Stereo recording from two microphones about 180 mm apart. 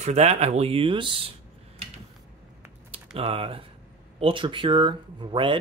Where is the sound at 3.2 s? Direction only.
30° right (ahead or behind).